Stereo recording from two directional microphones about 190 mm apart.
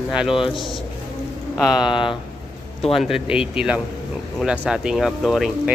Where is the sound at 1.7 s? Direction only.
25° left (ahead or behind).